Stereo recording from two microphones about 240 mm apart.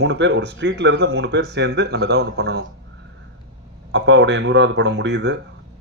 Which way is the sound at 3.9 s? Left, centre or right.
Right.